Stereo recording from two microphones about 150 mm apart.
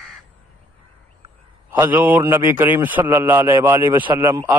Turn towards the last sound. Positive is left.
turn(degrees=-20)  # may be behind; listen again after turning